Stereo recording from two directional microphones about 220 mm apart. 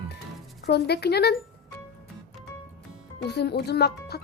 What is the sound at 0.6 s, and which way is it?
Speech, 45° left (ahead or behind).